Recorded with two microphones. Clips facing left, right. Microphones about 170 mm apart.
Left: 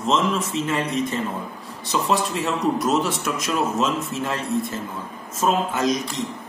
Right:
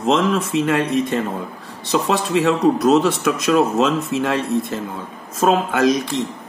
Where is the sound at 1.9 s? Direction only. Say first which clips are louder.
Right 4 dB; 90° right; by 4.4 s 70° right (ahead or behind).